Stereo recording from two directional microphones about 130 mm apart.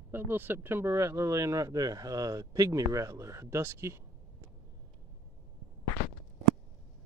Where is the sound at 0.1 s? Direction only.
15° right (ahead or behind).